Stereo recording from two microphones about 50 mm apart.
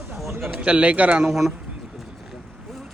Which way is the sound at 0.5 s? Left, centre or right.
Right.